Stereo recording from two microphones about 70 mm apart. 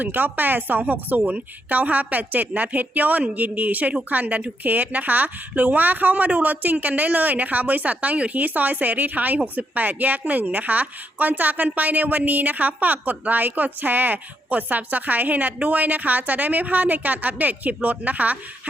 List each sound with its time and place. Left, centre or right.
0.0 s a woman's voice: right